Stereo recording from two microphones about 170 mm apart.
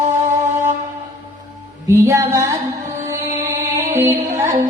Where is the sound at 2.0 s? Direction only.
20° right (ahead or behind).